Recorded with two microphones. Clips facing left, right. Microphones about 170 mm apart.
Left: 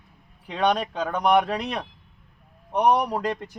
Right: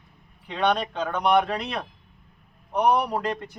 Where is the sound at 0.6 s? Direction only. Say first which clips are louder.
Left 1 dB; 10° left (ahead or behind).